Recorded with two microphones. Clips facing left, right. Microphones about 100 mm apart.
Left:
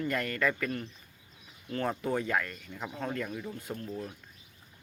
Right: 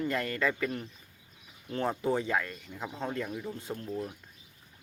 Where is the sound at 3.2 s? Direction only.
10° right (ahead or behind).